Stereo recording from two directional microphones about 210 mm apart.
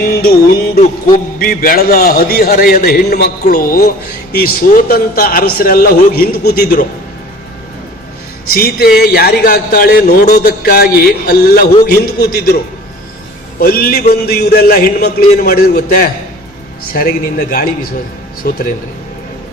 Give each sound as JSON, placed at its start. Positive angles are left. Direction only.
{"t": 0.0, "sound": "music", "side_deg": 45}
{"t": 8.5, "sound": "music", "side_deg": 45}
{"t": 13.6, "sound": "music", "side_deg": 45}